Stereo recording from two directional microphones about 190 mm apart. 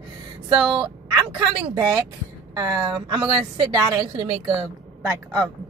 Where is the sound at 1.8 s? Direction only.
15° right (ahead or behind).